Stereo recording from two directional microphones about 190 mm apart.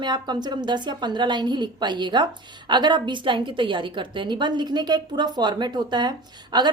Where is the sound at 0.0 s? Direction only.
20° right (ahead or behind).